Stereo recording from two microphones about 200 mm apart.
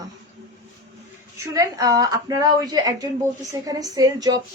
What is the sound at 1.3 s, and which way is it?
A woman's voice, 15° right (ahead or behind).